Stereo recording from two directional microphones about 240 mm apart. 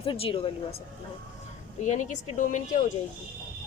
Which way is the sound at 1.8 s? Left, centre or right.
Left.